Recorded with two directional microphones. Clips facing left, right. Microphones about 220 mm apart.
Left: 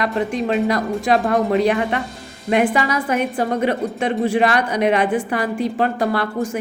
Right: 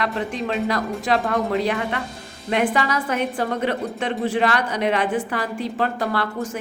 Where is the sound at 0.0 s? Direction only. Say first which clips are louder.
Left 4 dB; 15° left (ahead or behind).